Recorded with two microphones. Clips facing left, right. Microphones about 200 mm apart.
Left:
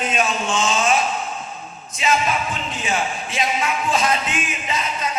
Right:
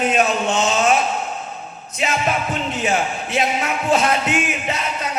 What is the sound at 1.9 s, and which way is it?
Music, 60° right (ahead or behind).